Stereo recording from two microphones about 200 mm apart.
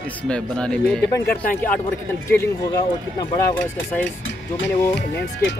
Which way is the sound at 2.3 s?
15° left (ahead or behind).